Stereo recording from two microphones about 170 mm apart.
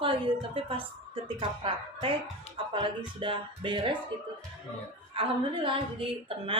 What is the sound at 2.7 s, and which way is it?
Speech, 30° right (ahead or behind).